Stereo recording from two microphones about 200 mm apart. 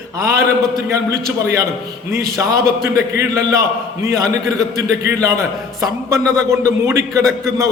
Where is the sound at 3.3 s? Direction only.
15° right (ahead or behind).